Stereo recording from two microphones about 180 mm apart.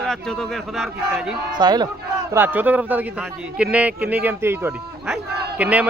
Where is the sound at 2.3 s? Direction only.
10° right (ahead or behind).